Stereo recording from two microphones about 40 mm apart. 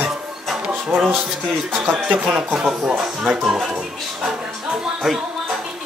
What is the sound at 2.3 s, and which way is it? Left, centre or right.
Speech, centre.